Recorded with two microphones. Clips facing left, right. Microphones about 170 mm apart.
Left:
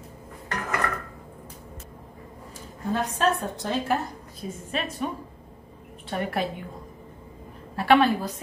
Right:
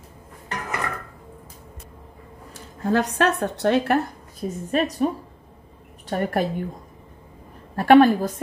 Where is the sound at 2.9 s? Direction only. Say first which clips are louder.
Right 4 dB; 80° right.